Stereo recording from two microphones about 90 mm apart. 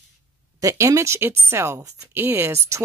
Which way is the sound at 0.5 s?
35° right (ahead or behind).